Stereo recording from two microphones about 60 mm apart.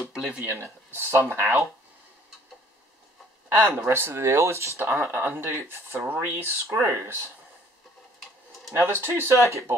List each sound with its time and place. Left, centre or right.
0.4 s speech: right
3.4 s speech: right
4.7 s speech: right
5.0 s speech: right
8.7 s speech: right